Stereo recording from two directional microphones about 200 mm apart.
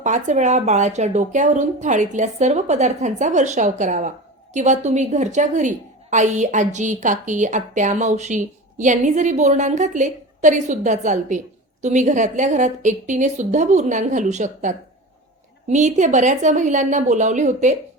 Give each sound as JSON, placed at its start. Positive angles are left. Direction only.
{"t": 0.0, "sound": "a woman's voice", "side_deg": -35}